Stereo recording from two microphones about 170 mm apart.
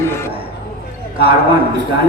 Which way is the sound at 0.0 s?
15° left (ahead or behind).